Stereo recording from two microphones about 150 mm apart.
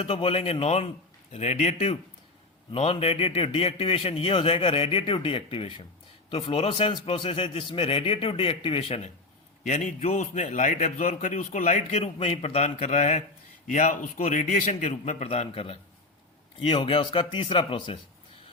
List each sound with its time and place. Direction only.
0.0 s a man's voice: 40° left (ahead or behind)
9.6 s a man's voice: 50° left (ahead or behind); by 18.0 s 35° left (ahead or behind)